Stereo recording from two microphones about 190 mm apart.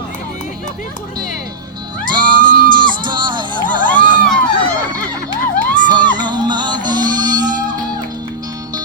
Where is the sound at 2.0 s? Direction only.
25° right (ahead or behind).